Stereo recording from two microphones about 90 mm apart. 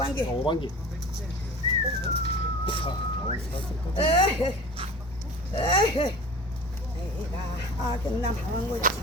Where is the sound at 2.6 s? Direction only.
75° left (ahead or behind).